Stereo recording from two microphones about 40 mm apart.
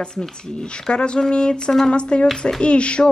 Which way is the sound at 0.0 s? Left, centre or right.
Centre.